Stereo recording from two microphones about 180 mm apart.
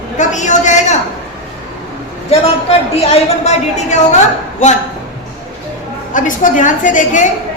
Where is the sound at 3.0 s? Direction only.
40° left (ahead or behind).